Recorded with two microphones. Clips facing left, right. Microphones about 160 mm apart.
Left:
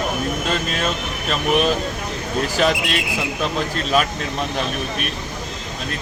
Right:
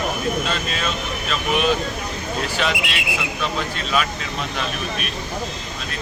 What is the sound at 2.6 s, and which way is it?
Speech, 40° left (ahead or behind).